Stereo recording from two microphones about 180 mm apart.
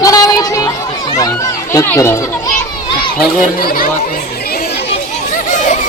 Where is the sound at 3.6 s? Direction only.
55° left (ahead or behind).